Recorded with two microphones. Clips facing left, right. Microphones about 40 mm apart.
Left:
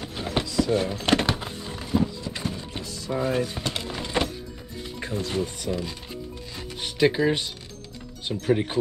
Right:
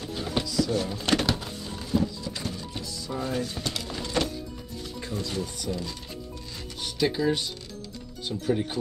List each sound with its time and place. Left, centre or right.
0.0 s a sound: left
2.8 s music: left
5.2 s speech: left